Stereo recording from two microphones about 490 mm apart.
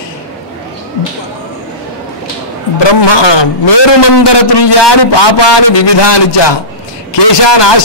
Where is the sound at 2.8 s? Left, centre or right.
Left.